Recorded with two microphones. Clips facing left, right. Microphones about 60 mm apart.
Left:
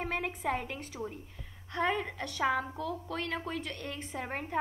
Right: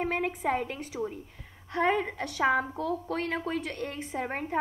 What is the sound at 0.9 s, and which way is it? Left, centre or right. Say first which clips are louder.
A woman's voice: right 6 dB; right.